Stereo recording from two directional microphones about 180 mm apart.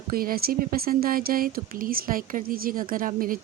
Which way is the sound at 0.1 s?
55° right (ahead or behind).